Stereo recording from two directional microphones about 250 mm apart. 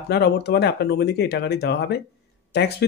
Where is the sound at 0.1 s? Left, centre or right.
Left.